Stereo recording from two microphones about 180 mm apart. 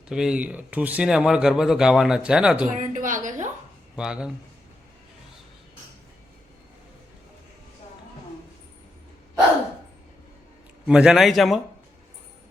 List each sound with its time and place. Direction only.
0.1 s speech: 5° right (ahead or behind)
2.6 s speech: 45° right (ahead or behind)
3.9 s speech: 5° right (ahead or behind)
10.8 s speech: 5° right (ahead or behind)